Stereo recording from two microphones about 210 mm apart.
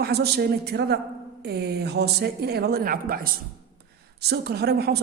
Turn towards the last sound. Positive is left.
turn(degrees=-50)  # may be behind; listen again after turning